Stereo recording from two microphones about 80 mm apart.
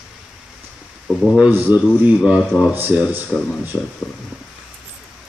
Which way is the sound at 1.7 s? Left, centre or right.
Right.